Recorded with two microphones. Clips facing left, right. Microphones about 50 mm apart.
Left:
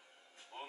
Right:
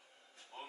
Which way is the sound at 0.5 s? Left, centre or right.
Left.